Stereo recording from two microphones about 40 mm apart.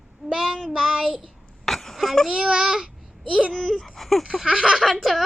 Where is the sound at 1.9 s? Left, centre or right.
Centre.